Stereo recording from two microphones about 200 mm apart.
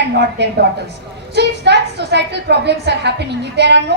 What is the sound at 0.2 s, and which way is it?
A woman's voice, 60° right (ahead or behind).